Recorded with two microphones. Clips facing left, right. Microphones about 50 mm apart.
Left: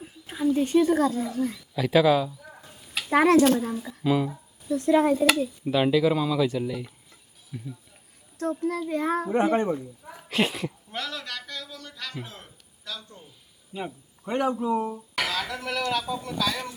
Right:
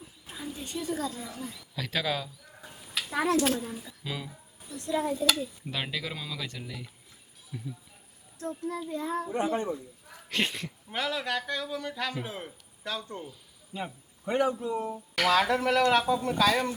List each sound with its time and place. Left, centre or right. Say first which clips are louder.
0.3 s a woman's voice: left 16 dB; left
1.7 s speech: left 11 dB; centre
2.9 s a sound: left 8 dB; left
4.0 s speech: left 15 dB; centre
4.3 s a woman's voice: left 15 dB; left
5.0 s speech: left 7 dB; left
5.6 s speech: left 18 dB; centre
8.4 s a child's voice: left 7 dB; left
9.3 s a woman's voice: left 7 dB; left
10.2 s speech: left 5 dB; centre
10.9 s speech: right 8 dB; centre
12.8 s speech: right 4 dB; right
13.7 s a man's voice: left 3 dB; centre
15.3 s speech: right 6 dB; right